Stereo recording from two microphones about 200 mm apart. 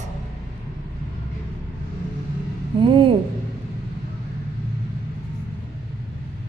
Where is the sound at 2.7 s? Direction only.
25° right (ahead or behind).